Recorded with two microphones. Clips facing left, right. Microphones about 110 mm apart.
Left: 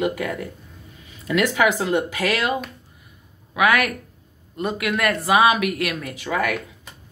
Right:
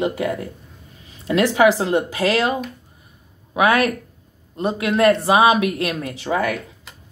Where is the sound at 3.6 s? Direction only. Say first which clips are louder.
Right 2 dB; 30° right (ahead or behind).